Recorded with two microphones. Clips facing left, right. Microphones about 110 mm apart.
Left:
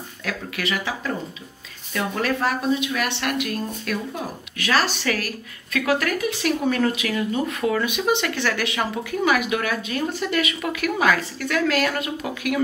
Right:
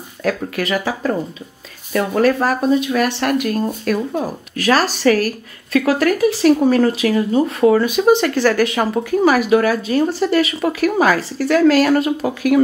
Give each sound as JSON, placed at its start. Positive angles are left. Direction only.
{"t": 0.2, "sound": "a woman's voice", "side_deg": -40}